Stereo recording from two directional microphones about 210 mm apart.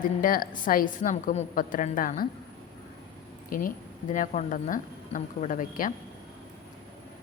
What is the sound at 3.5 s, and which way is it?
A man's voice, 40° left (ahead or behind).